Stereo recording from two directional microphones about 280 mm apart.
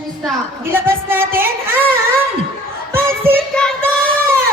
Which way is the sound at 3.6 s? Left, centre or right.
Centre.